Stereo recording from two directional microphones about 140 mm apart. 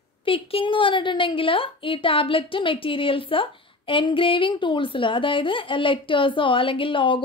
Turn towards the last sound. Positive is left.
turn(degrees=35)  # may be behind; listen again after turning